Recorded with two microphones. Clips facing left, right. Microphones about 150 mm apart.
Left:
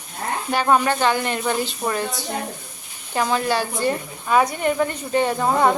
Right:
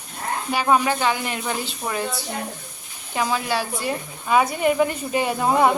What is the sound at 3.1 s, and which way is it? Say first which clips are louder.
A woman's voice: left 2 dB; 5° right (ahead or behind).